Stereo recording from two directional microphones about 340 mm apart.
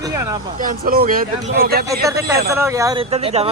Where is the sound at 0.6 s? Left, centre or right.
Right.